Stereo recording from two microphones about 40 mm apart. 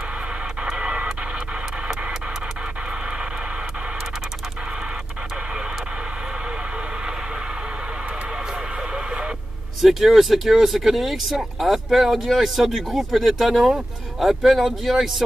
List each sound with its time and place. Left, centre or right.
0.7 s radio: right
8.9 s radio: right
9.8 s speech: centre